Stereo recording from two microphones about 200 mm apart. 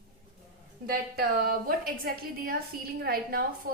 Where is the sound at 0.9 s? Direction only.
50° right (ahead or behind).